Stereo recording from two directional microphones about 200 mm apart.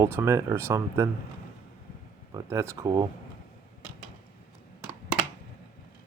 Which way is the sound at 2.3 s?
15° right (ahead or behind).